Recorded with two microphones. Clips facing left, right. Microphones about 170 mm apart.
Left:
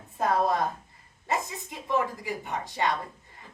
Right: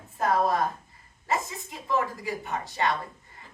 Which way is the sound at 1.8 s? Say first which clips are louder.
Even; 15° left (ahead or behind).